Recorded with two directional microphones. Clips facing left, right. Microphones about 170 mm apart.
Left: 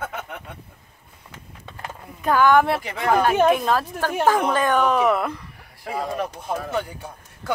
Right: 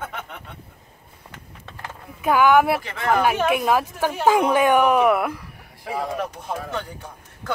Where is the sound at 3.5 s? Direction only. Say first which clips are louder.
Right 2 dB; 10° right (ahead or behind); by 7.5 s 10° left (ahead or behind).